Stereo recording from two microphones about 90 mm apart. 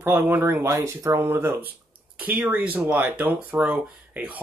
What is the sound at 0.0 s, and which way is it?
Speech, 25° right (ahead or behind).